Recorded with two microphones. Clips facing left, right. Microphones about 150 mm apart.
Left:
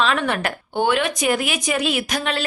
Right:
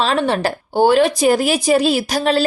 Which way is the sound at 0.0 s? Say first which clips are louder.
Right 4 dB; 30° right (ahead or behind).